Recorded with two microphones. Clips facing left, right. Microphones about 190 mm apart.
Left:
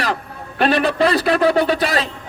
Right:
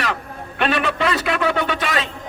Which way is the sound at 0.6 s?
35° left (ahead or behind).